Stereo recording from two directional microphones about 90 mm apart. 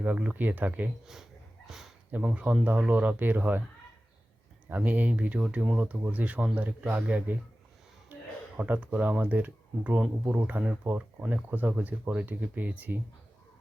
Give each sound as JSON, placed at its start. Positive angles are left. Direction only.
{"t": 0.0, "sound": "speech", "side_deg": -15}
{"t": 1.0, "sound": "a sound", "side_deg": -5}
{"t": 2.1, "sound": "speech", "side_deg": -15}
{"t": 4.7, "sound": "speech", "side_deg": -20}
{"t": 8.5, "sound": "speech", "side_deg": -15}